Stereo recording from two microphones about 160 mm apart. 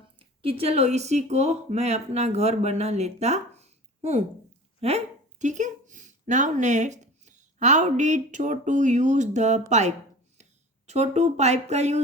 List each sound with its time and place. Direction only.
0.2 s speech: 35° right (ahead or behind)